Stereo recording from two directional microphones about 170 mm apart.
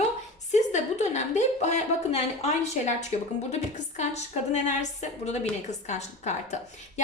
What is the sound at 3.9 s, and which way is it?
A woman's voice, 45° left (ahead or behind).